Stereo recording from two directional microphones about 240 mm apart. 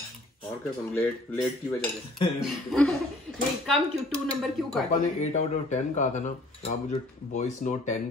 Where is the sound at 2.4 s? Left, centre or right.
Centre.